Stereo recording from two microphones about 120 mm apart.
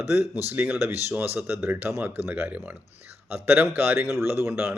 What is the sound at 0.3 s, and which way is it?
Speech, 15° right (ahead or behind).